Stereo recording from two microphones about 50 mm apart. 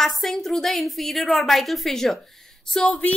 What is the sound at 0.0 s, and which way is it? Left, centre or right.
A woman's voice, centre.